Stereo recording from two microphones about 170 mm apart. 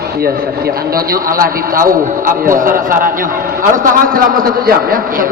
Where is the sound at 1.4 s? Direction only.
55° right (ahead or behind).